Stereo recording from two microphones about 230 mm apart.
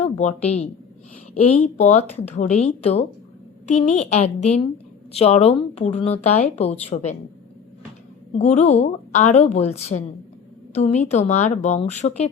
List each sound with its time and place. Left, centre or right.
0.0 s a woman's voice: left
8.3 s speech: left